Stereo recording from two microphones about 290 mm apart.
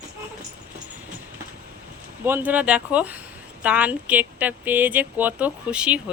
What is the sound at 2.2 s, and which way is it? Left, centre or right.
Speech, centre.